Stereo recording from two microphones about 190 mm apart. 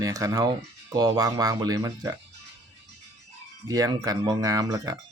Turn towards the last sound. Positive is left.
turn(degrees=-15)  # may be behind; listen again after turning